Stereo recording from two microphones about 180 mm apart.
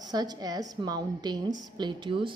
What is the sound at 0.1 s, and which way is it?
A woman's voice, 20° right (ahead or behind).